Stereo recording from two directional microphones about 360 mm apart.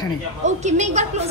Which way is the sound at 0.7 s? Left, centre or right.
Centre.